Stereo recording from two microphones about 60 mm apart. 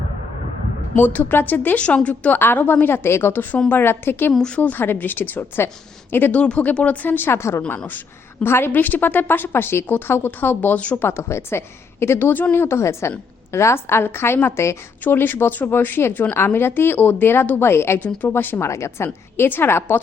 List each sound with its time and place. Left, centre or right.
0.9 s a woman's voice: left
2.4 s a woman's voice: left
4.3 s a woman's voice: centre
4.5 s a woman's voice: left
6.3 s speech: centre
7.3 s a woman's voice: left
10.8 s speech: left
11.2 s a woman's voice: left
15.0 s a woman's voice: left
18.6 s a woman's voice: left